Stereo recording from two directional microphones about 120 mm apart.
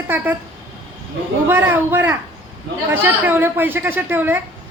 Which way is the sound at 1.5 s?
15° right (ahead or behind).